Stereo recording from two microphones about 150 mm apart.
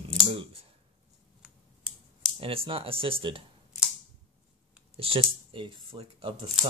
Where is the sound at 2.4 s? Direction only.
35° right (ahead or behind).